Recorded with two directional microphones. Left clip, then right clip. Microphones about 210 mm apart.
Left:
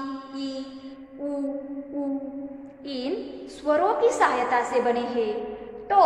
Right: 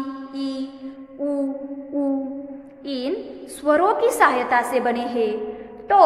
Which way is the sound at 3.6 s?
35° right (ahead or behind).